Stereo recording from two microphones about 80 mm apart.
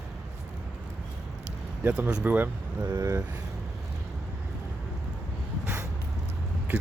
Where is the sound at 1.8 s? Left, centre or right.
Right.